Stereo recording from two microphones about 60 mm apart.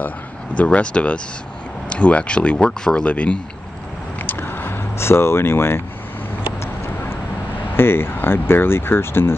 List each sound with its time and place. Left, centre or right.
0.6 s speech: centre
4.2 s a sound: left
6.6 s vehicle: left
7.7 s speech: left